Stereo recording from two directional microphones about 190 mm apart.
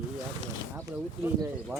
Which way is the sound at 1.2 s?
10° right (ahead or behind).